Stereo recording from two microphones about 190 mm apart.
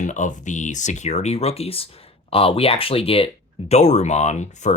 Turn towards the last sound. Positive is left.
turn(degrees=40)  # may be behind; listen again after turning